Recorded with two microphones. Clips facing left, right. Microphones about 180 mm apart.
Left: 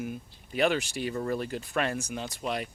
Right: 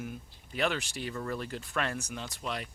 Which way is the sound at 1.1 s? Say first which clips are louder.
Left 5 dB; 25° left (ahead or behind).